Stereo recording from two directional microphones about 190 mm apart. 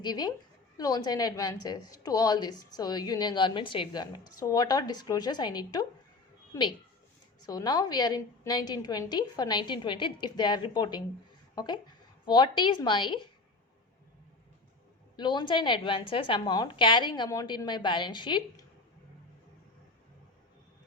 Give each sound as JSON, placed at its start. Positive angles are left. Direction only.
{"t": 0.0, "sound": "a woman's voice", "side_deg": 20}
{"t": 15.1, "sound": "a woman's voice", "side_deg": 25}